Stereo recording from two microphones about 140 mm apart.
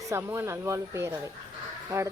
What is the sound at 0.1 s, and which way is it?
A woman's voice, 20° right (ahead or behind).